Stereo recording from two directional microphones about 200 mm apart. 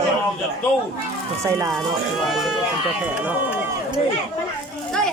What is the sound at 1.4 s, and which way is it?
Speech, 15° right (ahead or behind).